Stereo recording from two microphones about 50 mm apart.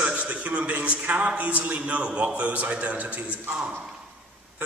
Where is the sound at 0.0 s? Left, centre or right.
Right.